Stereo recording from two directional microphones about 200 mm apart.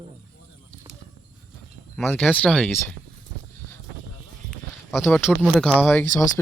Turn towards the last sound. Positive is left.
turn(degrees=10)  # may be behind; listen again after turning